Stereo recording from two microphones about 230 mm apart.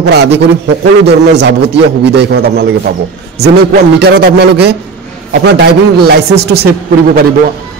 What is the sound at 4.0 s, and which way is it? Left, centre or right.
Speech, right.